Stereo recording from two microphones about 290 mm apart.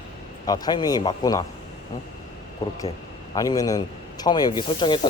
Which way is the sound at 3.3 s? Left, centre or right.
Centre.